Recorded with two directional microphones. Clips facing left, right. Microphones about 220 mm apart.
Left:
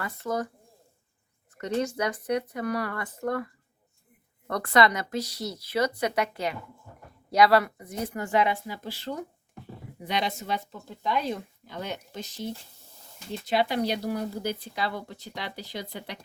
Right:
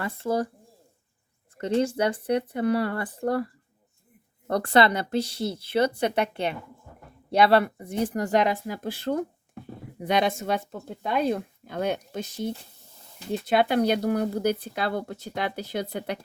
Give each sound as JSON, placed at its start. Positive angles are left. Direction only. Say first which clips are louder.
{"t": 0.0, "sound": "speech", "louder": "right 4 dB", "side_deg": -30}
{"t": 1.5, "sound": "speech", "louder": "right 4 dB", "side_deg": -30}
{"t": 13.5, "sound": "speech", "louder": "right 4 dB", "side_deg": -55}